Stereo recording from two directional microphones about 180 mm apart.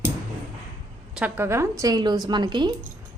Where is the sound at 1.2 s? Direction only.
10° right (ahead or behind).